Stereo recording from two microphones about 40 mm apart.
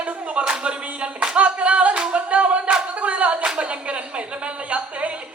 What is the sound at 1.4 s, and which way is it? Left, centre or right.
A capella, right.